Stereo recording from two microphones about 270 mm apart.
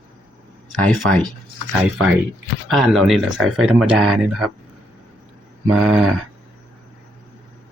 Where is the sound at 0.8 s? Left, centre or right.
Centre.